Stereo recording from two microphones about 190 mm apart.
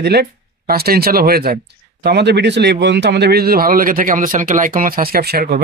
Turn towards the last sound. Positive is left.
turn(degrees=-50)  # may be behind; listen again after turning